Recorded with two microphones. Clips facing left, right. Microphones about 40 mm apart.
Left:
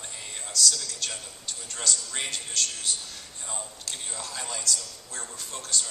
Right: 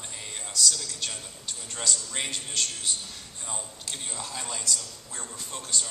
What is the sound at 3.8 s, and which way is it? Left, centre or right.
A man's voice, centre.